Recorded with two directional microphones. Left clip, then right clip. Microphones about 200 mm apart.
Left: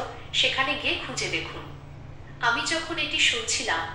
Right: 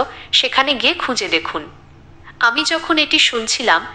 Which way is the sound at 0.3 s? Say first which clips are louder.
Right 8 dB; 40° right (ahead or behind).